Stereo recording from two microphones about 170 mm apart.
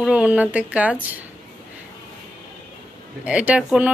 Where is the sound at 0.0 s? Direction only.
5° right (ahead or behind).